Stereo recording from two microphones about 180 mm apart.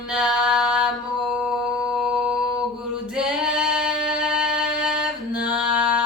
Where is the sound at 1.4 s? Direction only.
5° right (ahead or behind).